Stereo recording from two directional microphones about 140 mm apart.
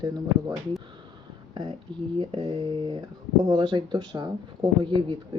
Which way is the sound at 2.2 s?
40° right (ahead or behind).